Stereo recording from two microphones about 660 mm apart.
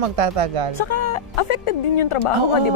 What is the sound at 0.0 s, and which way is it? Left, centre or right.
Speech, right.